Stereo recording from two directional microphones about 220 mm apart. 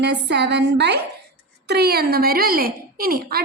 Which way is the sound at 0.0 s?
50° right (ahead or behind).